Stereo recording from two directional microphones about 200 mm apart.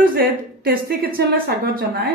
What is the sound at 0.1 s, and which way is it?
A woman's voice, 50° right (ahead or behind).